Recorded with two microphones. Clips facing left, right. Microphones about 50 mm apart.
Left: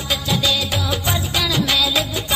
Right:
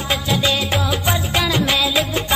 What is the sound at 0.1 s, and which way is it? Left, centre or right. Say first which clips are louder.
Music: right 1 dB; right.